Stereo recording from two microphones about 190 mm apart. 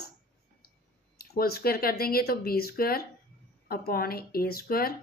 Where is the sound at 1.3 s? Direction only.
50° left (ahead or behind).